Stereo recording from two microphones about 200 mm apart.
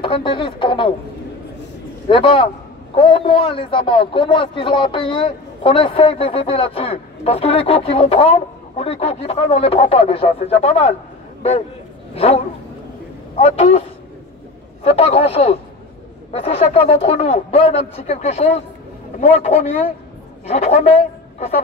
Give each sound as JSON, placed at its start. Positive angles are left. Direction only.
{"t": 0.0, "sound": "a man's voice", "side_deg": 25}
{"t": 2.0, "sound": "a man's voice", "side_deg": 25}
{"t": 13.4, "sound": "a man's voice", "side_deg": 30}